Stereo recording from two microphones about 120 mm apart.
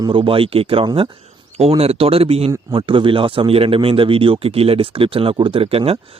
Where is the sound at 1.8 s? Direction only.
55° right (ahead or behind).